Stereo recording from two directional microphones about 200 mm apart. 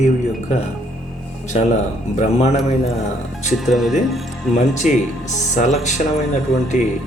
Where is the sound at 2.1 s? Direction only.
35° left (ahead or behind).